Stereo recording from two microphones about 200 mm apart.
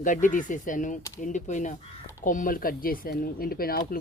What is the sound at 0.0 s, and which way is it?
Speech, 40° left (ahead or behind).